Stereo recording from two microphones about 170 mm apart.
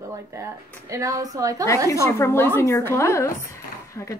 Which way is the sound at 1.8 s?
15° left (ahead or behind).